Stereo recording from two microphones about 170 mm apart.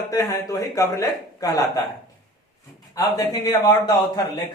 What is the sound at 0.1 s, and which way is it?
A man's voice, 20° left (ahead or behind).